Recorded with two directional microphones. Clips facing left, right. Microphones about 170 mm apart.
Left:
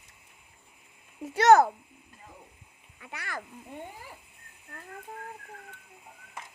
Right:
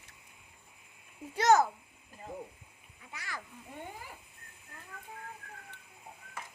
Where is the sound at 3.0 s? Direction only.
65° left (ahead or behind).